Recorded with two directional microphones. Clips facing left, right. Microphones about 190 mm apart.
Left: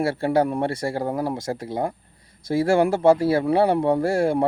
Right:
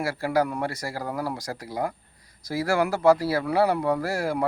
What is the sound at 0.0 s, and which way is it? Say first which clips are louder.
Speech: left 4 dB; 30° left (ahead or behind).